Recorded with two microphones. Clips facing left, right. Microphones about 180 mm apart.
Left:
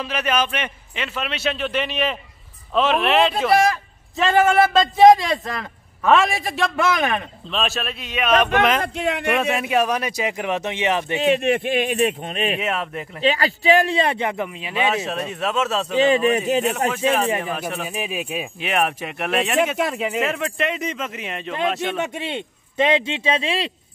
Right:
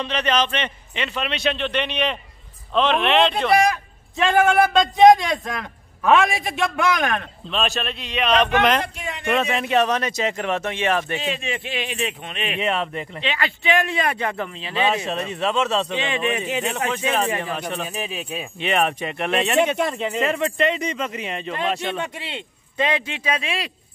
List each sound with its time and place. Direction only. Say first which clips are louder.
0.0 s a man's voice: right 1 dB; 5° left (ahead or behind)
8.8 s speech: left 8 dB; 70° left (ahead or behind)
9.3 s speech: right 2 dB; 5° left (ahead or behind)
11.1 s speech: left 9 dB; 60° left (ahead or behind); by 12.5 s 40° left (ahead or behind)
12.5 s a man's voice: right 1 dB; 5° left (ahead or behind)
13.2 s speech: left 7 dB; 40° left (ahead or behind)
14.3 s speech: left 1 dB; 15° left (ahead or behind)
15.0 s a man's voice: right 1 dB; centre (ahead or behind)
16.0 s speech: left 7 dB; 40° left (ahead or behind)
16.9 s a man's voice: left 2 dB; 5° left (ahead or behind)
22.0 s speech: left 5 dB; 20° left (ahead or behind)